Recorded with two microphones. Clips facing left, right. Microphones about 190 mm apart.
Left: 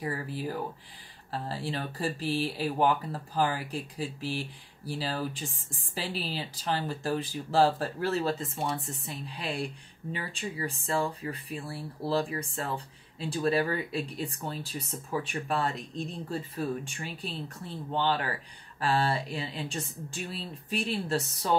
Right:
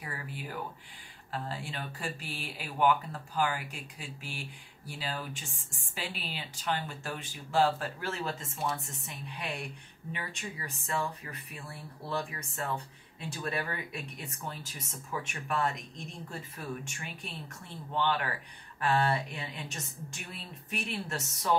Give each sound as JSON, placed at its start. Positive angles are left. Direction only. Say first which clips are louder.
{"t": 0.0, "sound": "speech", "louder": "left 8 dB", "side_deg": 35}